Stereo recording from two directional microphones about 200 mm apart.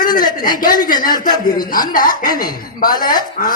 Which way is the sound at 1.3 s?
20° left (ahead or behind).